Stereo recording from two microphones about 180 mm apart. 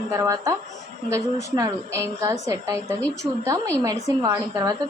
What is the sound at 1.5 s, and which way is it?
A woman's voice, 15° right (ahead or behind).